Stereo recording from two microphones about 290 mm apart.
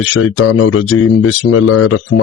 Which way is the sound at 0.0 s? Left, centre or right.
Left.